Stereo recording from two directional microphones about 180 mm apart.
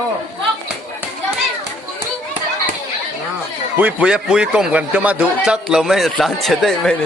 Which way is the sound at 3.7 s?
5° right (ahead or behind).